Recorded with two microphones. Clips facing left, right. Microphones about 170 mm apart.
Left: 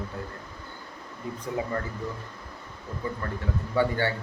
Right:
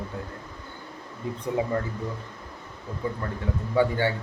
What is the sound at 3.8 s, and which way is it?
Speech, 15° right (ahead or behind).